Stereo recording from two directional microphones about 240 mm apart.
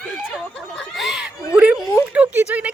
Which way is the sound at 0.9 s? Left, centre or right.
Centre.